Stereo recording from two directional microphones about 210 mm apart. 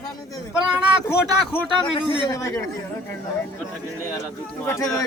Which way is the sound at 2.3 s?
15° left (ahead or behind).